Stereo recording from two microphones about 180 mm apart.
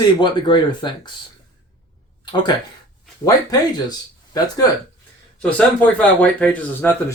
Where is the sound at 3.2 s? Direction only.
20° left (ahead or behind).